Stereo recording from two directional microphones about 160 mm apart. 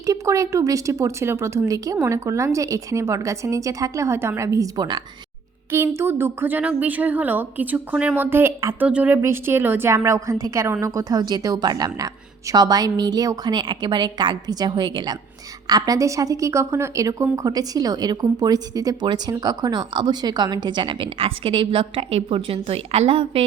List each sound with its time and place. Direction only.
0.0 s a woman's voice: 20° right (ahead or behind)